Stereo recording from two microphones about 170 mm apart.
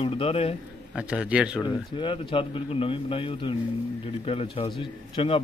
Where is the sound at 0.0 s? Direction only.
35° left (ahead or behind).